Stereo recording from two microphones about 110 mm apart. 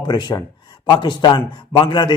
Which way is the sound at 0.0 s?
40° left (ahead or behind).